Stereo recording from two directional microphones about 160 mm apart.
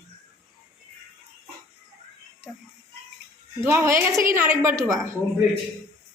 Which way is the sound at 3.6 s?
15° right (ahead or behind).